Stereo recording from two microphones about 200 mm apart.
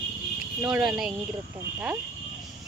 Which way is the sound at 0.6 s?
5° right (ahead or behind).